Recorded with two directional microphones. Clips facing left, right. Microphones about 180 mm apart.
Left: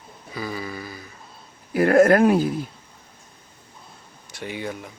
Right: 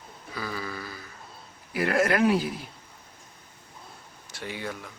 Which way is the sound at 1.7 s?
45° left (ahead or behind).